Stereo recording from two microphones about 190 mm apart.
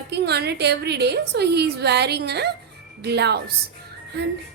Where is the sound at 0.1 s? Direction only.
60° right (ahead or behind).